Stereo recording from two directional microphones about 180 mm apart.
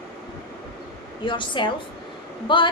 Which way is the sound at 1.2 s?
25° left (ahead or behind).